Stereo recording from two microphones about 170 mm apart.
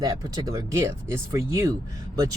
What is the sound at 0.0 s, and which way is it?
Speech, 20° right (ahead or behind).